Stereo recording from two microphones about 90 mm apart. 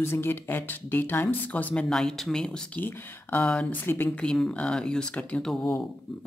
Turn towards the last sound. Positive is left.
turn(degrees=10)  # may be behind; listen again after turning